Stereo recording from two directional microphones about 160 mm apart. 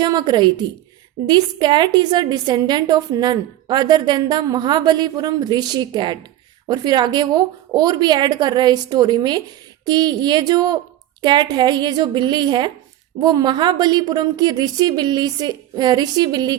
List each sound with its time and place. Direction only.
0.0 s a woman's voice: 25° right (ahead or behind)